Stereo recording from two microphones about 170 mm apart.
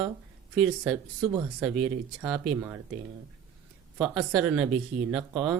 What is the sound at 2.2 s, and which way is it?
Speech, centre (ahead or behind).